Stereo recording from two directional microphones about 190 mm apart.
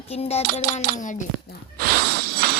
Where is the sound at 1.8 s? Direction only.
55° right (ahead or behind).